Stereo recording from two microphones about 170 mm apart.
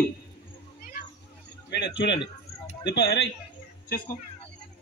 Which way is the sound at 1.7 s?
90° left.